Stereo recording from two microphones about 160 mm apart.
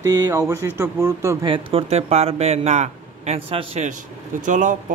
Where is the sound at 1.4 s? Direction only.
35° right (ahead or behind).